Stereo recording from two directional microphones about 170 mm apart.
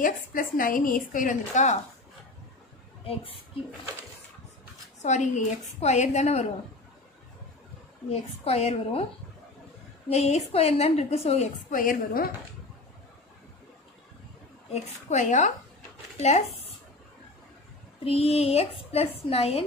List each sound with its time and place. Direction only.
0.0 s a woman's voice: 55° left (ahead or behind)
3.1 s a woman's voice: 35° left (ahead or behind)
5.0 s a woman's voice: 45° left (ahead or behind)
8.1 s a woman's voice: 35° left (ahead or behind)
10.0 s a woman's voice: 40° left (ahead or behind)
11.7 s a woman's voice: 55° left (ahead or behind)
14.7 s a woman's voice: 45° left (ahead or behind)
18.0 s a woman's voice: 35° left (ahead or behind)